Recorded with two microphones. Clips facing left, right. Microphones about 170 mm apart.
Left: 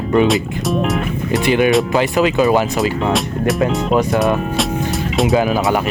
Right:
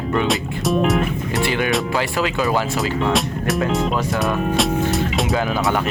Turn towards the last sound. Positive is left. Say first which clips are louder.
# left 5 dB
turn(degrees=10)  # may be behind; listen again after turning